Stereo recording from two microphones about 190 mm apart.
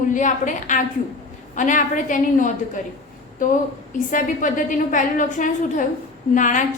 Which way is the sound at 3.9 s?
45° left (ahead or behind).